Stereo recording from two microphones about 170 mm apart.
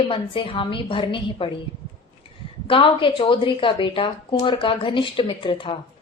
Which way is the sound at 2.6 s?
30° left (ahead or behind).